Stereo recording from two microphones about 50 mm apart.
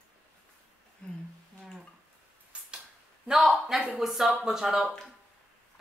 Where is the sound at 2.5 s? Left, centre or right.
Right.